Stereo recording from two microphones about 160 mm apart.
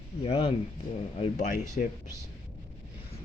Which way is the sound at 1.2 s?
50° left (ahead or behind).